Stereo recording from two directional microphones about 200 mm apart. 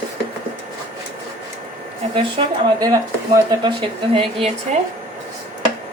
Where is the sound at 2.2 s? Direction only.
20° right (ahead or behind).